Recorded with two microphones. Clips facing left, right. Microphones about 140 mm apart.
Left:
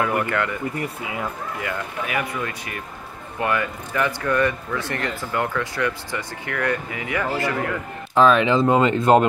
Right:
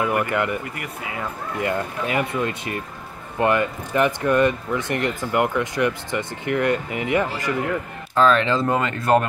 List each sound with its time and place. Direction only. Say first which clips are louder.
0.0 s speech: right 1 dB; 15° right (ahead or behind)
1.6 s speech: right 6 dB; 25° right (ahead or behind)
8.1 s speech: left 2 dB; 15° left (ahead or behind)